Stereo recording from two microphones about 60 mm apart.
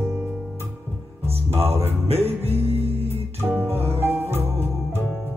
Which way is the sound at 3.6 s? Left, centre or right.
Right.